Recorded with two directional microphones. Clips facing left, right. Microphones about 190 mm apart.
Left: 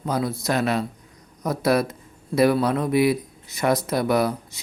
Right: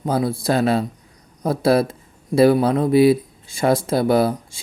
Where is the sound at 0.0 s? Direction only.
25° right (ahead or behind).